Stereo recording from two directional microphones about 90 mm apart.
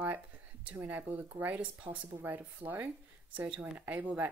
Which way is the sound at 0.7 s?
20° right (ahead or behind).